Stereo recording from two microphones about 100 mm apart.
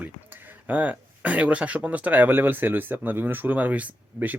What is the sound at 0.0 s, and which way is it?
Speech, 20° right (ahead or behind).